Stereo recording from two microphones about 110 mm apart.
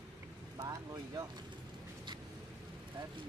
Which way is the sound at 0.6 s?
35° right (ahead or behind).